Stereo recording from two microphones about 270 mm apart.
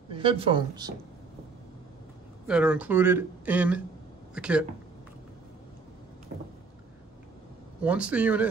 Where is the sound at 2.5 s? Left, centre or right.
Centre.